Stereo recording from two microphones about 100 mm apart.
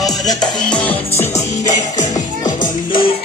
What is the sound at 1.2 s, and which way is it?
Music, 30° left (ahead or behind).